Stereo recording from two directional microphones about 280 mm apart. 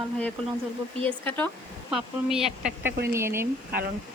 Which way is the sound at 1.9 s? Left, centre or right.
Centre.